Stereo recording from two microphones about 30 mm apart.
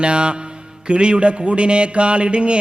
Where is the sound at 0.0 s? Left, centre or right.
Right.